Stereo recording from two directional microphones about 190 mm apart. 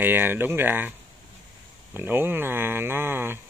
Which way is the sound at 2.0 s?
10° right (ahead or behind).